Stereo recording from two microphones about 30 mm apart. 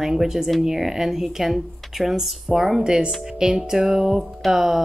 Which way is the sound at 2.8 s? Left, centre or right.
Right.